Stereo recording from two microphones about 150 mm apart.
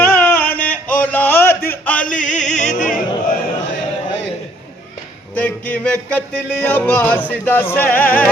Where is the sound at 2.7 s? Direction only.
55° left (ahead or behind).